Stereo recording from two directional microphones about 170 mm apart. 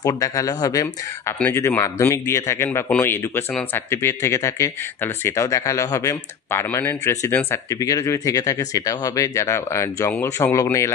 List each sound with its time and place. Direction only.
0.0 s speech: 20° left (ahead or behind)